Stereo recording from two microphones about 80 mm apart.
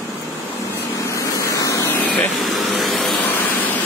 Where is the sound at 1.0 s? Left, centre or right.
Left.